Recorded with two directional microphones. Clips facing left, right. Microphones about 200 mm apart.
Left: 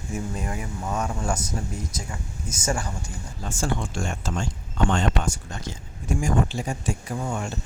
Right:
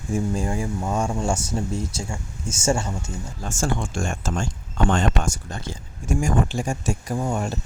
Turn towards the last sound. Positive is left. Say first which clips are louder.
# right 4 dB
turn(degrees=-40)  # may be behind; listen again after turning